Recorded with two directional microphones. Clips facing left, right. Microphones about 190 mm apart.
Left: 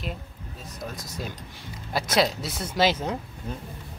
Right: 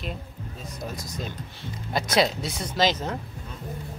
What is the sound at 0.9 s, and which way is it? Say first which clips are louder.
Speech: right 1 dB; 10° left (ahead or behind).